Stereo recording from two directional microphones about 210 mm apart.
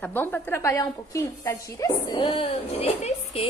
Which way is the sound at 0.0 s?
10° left (ahead or behind).